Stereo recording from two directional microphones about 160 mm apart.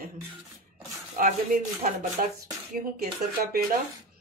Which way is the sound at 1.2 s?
60° right (ahead or behind).